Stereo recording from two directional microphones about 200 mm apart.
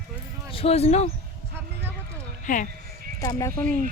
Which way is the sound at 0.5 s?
30° left (ahead or behind).